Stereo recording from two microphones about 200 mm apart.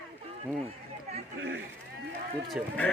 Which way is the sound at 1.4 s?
75° right (ahead or behind).